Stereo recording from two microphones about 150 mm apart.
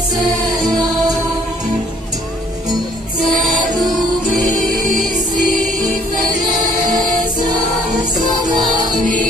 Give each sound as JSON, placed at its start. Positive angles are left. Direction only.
{"t": 3.3, "sound": "music", "side_deg": 0}
{"t": 5.1, "sound": "music", "side_deg": -60}